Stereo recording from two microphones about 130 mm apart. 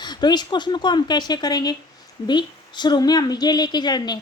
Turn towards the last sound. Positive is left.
turn(degrees=30)  # may be behind; listen again after turning